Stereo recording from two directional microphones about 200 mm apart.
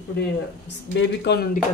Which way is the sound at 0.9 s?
65° left (ahead or behind).